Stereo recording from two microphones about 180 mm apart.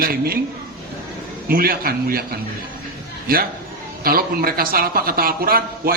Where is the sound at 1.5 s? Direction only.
55° right (ahead or behind).